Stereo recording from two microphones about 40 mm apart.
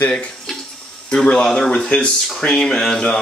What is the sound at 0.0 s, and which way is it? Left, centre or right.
Speech, left.